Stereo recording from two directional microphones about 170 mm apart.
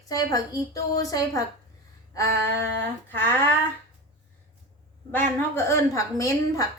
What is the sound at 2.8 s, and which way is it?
Female singing, 10° left (ahead or behind).